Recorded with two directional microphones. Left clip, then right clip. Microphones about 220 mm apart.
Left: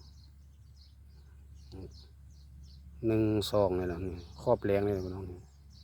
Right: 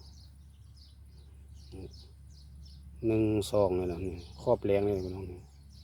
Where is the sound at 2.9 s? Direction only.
15° left (ahead or behind).